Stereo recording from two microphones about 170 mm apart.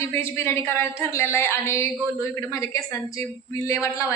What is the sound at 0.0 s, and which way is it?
A woman's voice, 15° left (ahead or behind).